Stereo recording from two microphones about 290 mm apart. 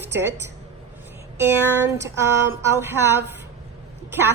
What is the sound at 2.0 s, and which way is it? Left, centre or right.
Speech, centre.